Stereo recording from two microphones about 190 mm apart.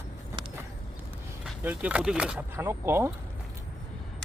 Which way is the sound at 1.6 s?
5° right (ahead or behind).